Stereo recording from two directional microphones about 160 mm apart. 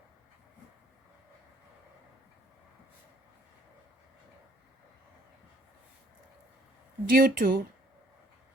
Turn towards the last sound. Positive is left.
turn(degrees=-65)  # may be behind; listen again after turning